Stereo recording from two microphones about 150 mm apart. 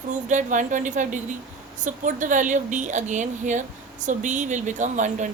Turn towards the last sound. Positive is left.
turn(degrees=-55)  # may be behind; listen again after turning